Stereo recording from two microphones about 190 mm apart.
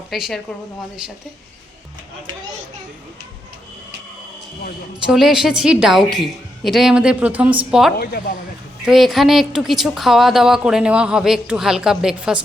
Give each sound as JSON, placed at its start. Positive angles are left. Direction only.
{"t": 0.1, "sound": "speech", "side_deg": 0}
{"t": 5.0, "sound": "speech", "side_deg": 0}
{"t": 7.9, "sound": "speech", "side_deg": 55}
{"t": 8.8, "sound": "speech", "side_deg": 0}